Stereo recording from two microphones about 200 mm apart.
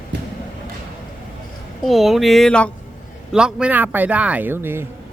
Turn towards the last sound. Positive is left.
turn(degrees=-10)  # may be behind; listen again after turning